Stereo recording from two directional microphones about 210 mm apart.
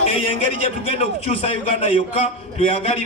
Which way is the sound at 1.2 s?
30° left (ahead or behind).